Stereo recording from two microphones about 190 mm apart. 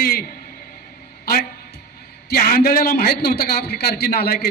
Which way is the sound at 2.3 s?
50° left (ahead or behind).